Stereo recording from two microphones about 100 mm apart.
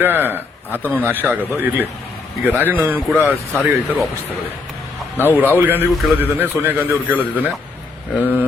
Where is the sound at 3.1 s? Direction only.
Centre (ahead or behind).